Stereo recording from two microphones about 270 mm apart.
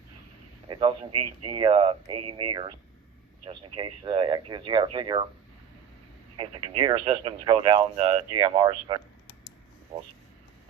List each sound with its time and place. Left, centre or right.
0.7 s speech: centre
6.3 s speech: centre